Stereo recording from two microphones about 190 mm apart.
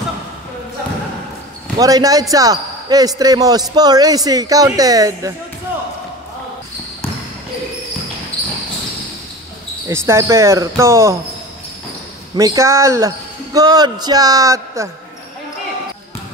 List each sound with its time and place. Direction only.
1.8 s speech: 20° right (ahead or behind)
9.8 s speech: 15° right (ahead or behind)
12.4 s speech: 15° right (ahead or behind)